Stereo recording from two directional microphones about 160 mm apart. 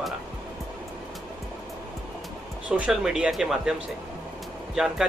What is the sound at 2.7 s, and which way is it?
Speech, 5° right (ahead or behind).